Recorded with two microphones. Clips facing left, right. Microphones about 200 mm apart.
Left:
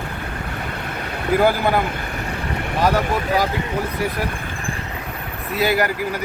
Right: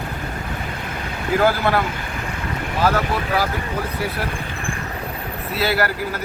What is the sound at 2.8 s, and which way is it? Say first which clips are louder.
Speech: left 1 dB; 15° left (ahead or behind).